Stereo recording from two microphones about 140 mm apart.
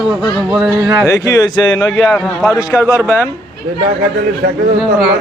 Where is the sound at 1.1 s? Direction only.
25° left (ahead or behind).